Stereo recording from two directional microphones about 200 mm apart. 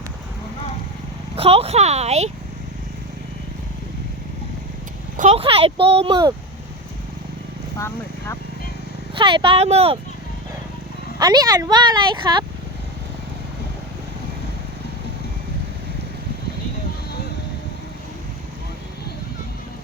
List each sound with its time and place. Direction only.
1.4 s speech: 30° right (ahead or behind)
5.1 s speech: 35° right (ahead or behind)
7.8 s speech: 15° left (ahead or behind)
9.1 s speech: 25° right (ahead or behind)
11.2 s speech: 20° right (ahead or behind)